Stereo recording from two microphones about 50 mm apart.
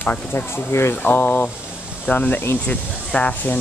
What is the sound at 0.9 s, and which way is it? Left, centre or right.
Speech, left.